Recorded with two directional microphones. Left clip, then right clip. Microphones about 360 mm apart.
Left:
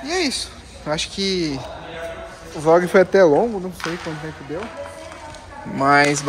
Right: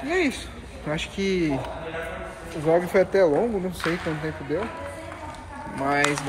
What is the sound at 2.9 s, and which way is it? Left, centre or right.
Speech, left.